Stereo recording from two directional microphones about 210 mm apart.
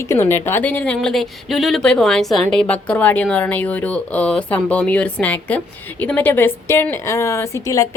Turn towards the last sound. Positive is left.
turn(degrees=15)  # may be behind; listen again after turning